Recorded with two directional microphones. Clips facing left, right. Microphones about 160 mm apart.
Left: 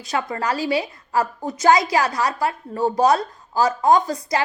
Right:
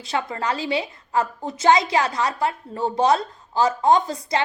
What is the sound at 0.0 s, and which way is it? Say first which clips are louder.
A woman's voice: left 1 dB; 25° right (ahead or behind).